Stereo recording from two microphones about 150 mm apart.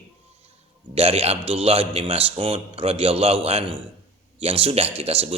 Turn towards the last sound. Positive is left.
turn(degrees=-40)  # may be behind; listen again after turning